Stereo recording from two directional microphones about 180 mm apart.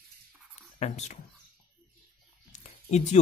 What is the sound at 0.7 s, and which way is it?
Speech, 40° left (ahead or behind).